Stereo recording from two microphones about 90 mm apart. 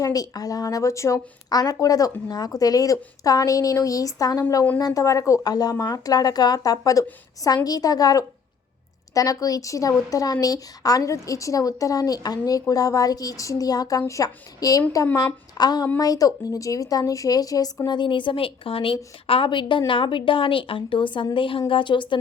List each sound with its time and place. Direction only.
0.0 s a woman's voice: 45° left (ahead or behind)
1.5 s a woman's voice: 45° left (ahead or behind); by 18.9 s 90° left
19.3 s a woman's voice: 70° left (ahead or behind)